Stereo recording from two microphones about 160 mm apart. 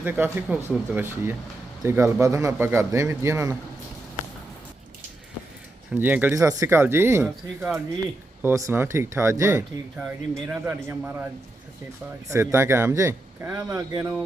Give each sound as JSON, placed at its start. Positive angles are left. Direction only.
{"t": 0.0, "sound": "a man's voice", "side_deg": -10}
{"t": 5.9, "sound": "a man's voice", "side_deg": -10}
{"t": 12.3, "sound": "a man's voice", "side_deg": -15}